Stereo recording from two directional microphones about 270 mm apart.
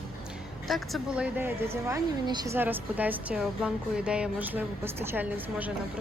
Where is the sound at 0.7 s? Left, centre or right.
Centre.